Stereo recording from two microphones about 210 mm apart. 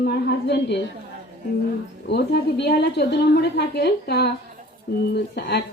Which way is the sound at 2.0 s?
55° left (ahead or behind).